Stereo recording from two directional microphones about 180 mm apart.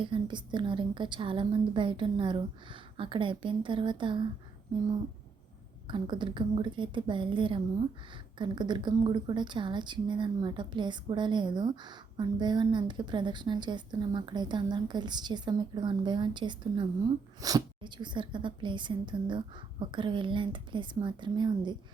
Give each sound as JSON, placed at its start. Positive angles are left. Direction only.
{"t": 0.0, "sound": "a woman's voice", "side_deg": -25}
{"t": 5.9, "sound": "a woman's voice", "side_deg": -25}